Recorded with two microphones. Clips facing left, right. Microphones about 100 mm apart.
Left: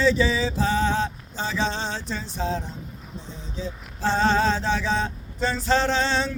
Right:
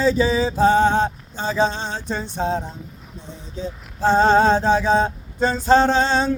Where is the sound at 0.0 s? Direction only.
40° right (ahead or behind).